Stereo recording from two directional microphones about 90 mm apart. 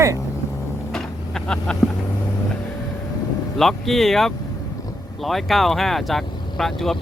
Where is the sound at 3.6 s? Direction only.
5° left (ahead or behind).